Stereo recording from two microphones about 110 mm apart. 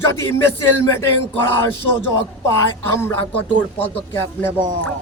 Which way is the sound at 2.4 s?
25° left (ahead or behind).